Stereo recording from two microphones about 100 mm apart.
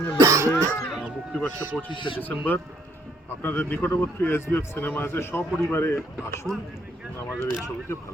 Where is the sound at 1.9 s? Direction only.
55° left (ahead or behind).